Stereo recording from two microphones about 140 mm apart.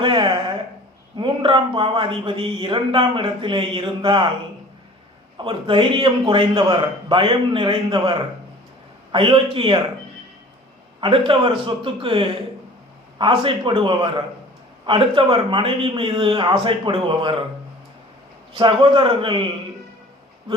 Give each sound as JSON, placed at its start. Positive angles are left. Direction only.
{"t": 0.0, "sound": "a sound", "side_deg": -35}
{"t": 1.1, "sound": "a man's voice", "side_deg": -35}
{"t": 5.4, "sound": "a man's voice", "side_deg": -40}
{"t": 11.0, "sound": "a man's voice", "side_deg": -35}
{"t": 18.5, "sound": "a man's voice", "side_deg": -35}